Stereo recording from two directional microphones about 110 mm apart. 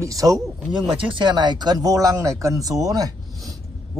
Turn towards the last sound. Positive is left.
turn(degrees=-35)  # may be behind; listen again after turning